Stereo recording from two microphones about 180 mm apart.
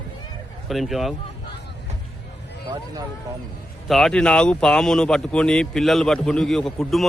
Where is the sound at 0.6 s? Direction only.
Centre (ahead or behind).